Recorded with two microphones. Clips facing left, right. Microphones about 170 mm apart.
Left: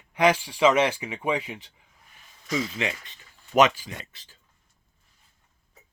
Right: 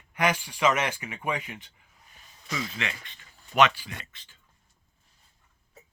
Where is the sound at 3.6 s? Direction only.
40° left (ahead or behind).